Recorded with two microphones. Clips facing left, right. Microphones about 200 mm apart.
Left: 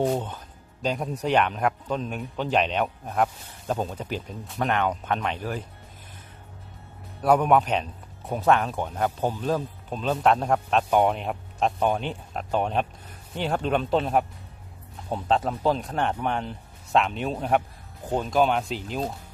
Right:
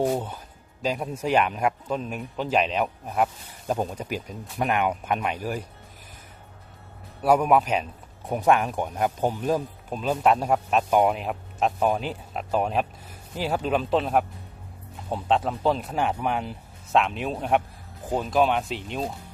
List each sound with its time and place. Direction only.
0.0 s speech: 10° right (ahead or behind)
7.2 s speech: 5° right (ahead or behind)